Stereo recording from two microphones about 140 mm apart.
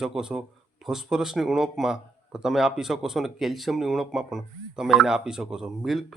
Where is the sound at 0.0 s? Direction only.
5° right (ahead or behind).